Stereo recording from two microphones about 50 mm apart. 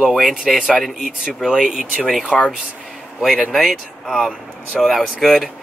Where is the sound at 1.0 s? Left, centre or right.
Centre.